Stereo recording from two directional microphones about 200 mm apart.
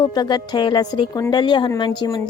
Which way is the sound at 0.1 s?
20° left (ahead or behind).